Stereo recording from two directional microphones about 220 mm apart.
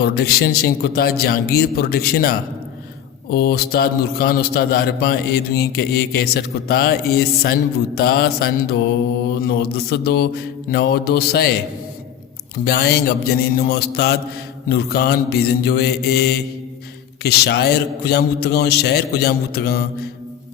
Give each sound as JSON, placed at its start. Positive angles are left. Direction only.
{"t": 0.0, "sound": "a man's voice", "side_deg": 45}
{"t": 12.6, "sound": "a man's voice", "side_deg": 45}
{"t": 17.2, "sound": "a man's voice", "side_deg": 45}